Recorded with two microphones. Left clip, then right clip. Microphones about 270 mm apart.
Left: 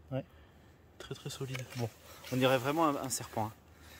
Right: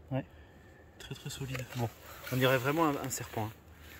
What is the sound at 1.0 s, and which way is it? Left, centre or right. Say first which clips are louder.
Speech: left 1 dB; centre.